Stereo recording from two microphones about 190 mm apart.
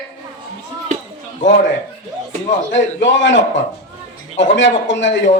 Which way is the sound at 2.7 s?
75° left (ahead or behind).